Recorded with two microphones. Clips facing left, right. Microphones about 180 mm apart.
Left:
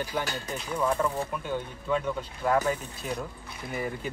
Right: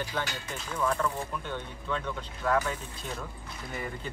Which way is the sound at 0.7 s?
15° left (ahead or behind).